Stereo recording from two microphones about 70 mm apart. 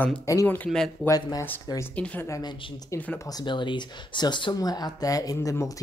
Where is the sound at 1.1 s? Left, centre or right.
Left.